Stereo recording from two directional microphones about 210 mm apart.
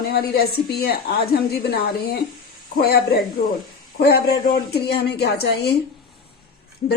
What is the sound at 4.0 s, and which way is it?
A woman's voice, 50° left (ahead or behind).